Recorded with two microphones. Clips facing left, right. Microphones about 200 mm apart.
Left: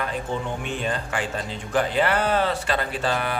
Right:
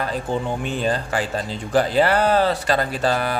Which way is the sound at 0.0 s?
35° right (ahead or behind).